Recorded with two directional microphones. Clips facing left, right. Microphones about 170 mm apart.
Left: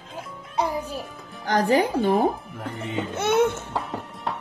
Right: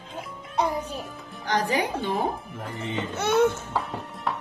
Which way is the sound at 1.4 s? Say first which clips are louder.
Left 5 dB; 45° left (ahead or behind).